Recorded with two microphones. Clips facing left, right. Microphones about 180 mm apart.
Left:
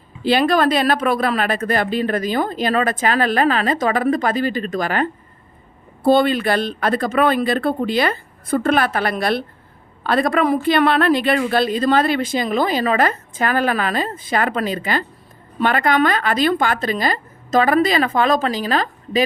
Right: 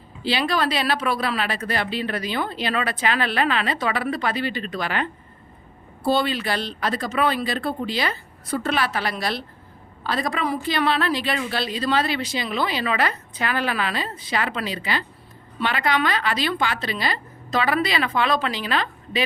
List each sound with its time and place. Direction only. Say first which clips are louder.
0.2 s a woman's voice: left 7 dB; 50° left (ahead or behind)